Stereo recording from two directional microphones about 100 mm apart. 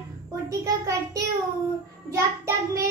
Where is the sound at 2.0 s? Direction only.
30° right (ahead or behind).